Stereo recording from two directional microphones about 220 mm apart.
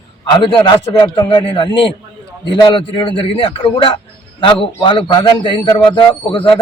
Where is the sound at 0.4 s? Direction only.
20° left (ahead or behind).